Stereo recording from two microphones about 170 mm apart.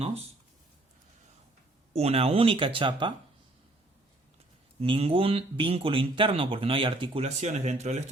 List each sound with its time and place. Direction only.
0.0 s speech: 35° right (ahead or behind)
1.9 s speech: 35° right (ahead or behind)
4.8 s speech: 35° right (ahead or behind)